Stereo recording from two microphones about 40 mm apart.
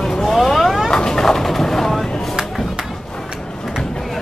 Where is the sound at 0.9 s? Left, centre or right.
Centre.